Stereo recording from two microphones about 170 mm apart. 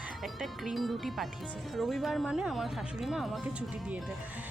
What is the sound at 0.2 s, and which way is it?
Speech, centre (ahead or behind).